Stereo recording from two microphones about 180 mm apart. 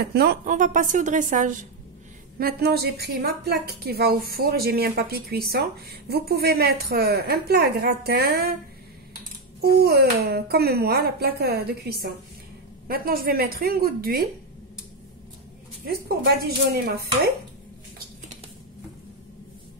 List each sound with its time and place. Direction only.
0.0 s a woman's voice: 60° right (ahead or behind)
0.5 s a woman's voice: 45° right (ahead or behind)
2.3 s a woman's voice: 60° right (ahead or behind)
9.6 s a woman's voice: 60° right (ahead or behind)
16.7 s a woman's voice: 60° right (ahead or behind)